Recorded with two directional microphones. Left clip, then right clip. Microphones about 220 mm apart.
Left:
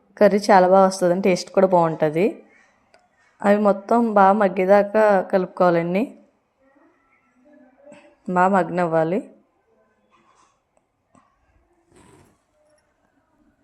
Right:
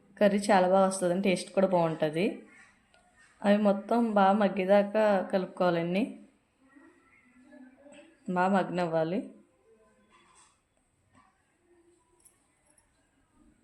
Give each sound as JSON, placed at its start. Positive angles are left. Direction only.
{"t": 0.1, "sound": "a woman's voice", "side_deg": 30}
{"t": 3.4, "sound": "a woman's voice", "side_deg": 30}
{"t": 7.9, "sound": "speech", "side_deg": 30}